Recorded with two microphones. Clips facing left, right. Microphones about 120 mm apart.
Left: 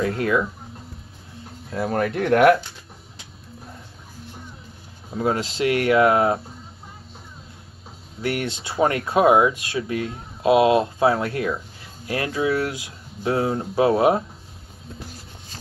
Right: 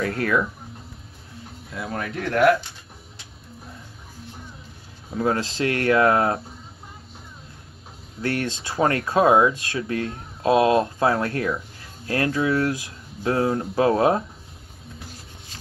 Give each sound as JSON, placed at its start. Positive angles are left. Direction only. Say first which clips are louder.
{"t": 0.0, "sound": "speech", "louder": "left 1 dB", "side_deg": 20}
{"t": 1.9, "sound": "speech", "louder": "left 8 dB", "side_deg": 55}
{"t": 5.1, "sound": "speech", "louder": "even", "side_deg": 20}
{"t": 8.2, "sound": "speech", "louder": "even", "side_deg": 15}